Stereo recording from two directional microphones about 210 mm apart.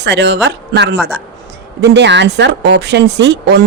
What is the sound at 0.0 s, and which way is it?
Speech, 55° right (ahead or behind).